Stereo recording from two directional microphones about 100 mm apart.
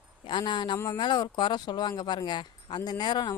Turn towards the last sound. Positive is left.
turn(degrees=45)  # may be behind; listen again after turning